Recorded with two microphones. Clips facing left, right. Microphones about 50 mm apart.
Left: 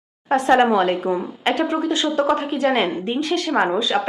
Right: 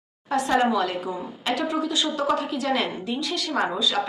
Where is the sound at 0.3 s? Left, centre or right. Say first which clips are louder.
Left 6 dB; left.